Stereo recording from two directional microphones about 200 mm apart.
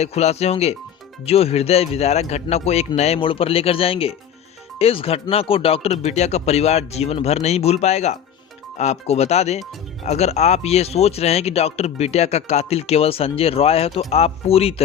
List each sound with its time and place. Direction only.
0.0 s speech: 35° left (ahead or behind)